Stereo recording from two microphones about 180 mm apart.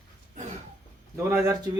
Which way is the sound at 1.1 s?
15° right (ahead or behind).